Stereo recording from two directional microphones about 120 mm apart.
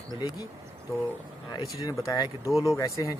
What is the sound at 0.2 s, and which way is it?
Speech, 35° left (ahead or behind).